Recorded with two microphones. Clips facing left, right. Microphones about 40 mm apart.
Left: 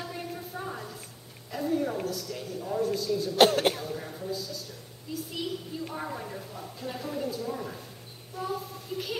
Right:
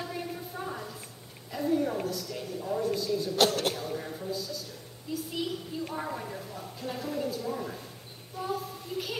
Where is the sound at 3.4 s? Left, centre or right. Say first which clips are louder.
Left 6 dB; left.